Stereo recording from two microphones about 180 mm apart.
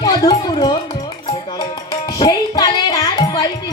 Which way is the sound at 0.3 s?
25° left (ahead or behind).